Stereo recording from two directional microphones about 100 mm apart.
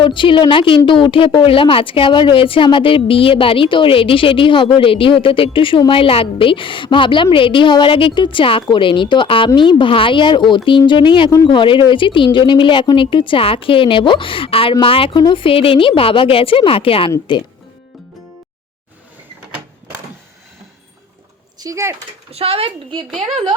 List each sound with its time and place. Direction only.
0.0 s speech: 55° left (ahead or behind)
21.6 s speech: 30° right (ahead or behind)
22.3 s a woman's voice: 75° right (ahead or behind)